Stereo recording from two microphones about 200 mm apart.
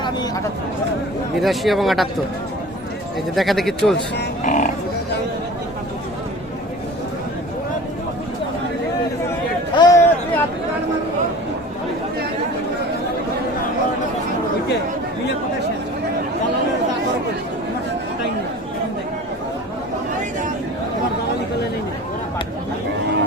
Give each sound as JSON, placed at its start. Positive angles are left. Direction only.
{"t": 1.4, "sound": "speech", "side_deg": 0}
{"t": 3.3, "sound": "speech", "side_deg": 0}
{"t": 4.4, "sound": "speech", "side_deg": 40}
{"t": 9.7, "sound": "a sound", "side_deg": 15}